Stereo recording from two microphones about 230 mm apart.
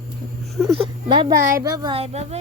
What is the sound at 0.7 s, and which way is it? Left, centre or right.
Speech, right.